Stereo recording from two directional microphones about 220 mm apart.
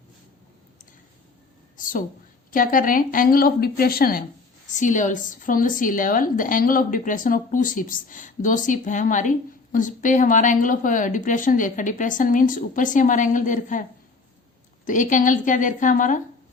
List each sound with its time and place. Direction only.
1.7 s a sound: 35° left (ahead or behind)
2.5 s a woman's voice: 40° left (ahead or behind)
14.8 s a woman's voice: 35° left (ahead or behind)